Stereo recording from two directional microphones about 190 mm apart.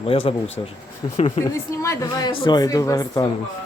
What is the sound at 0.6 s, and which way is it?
Speech, 20° left (ahead or behind).